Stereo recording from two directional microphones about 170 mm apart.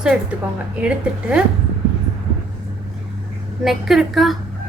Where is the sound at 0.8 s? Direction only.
5° right (ahead or behind).